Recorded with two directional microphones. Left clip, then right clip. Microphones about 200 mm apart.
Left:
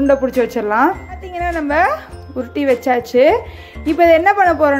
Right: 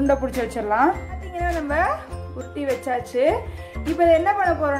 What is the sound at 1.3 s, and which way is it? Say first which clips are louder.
A woman's voice: left 6 dB; 30° left (ahead or behind).